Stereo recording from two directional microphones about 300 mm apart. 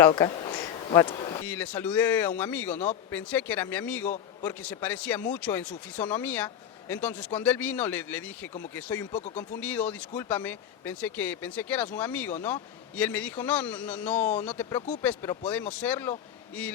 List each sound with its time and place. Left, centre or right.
0.0 s a sound: centre
1.5 s a man's voice: centre
9.1 s speech: left
9.6 s a man's voice: centre